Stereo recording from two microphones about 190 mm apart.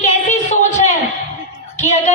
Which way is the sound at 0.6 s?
40° left (ahead or behind).